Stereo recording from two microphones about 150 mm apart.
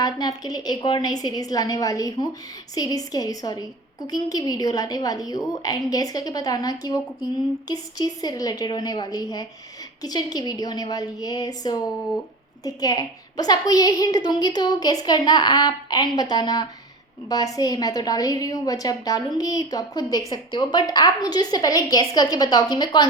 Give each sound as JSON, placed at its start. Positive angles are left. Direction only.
{"t": 0.0, "sound": "a woman's voice", "side_deg": 25}